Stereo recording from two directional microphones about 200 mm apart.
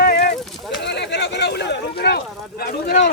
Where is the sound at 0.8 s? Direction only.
60° left (ahead or behind).